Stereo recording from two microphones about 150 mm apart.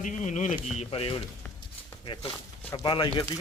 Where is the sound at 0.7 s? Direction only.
40° left (ahead or behind).